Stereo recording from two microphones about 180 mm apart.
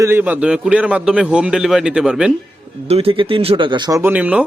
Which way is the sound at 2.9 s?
30° right (ahead or behind).